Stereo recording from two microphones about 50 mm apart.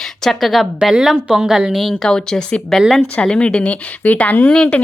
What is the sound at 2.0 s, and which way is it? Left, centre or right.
Speech, centre.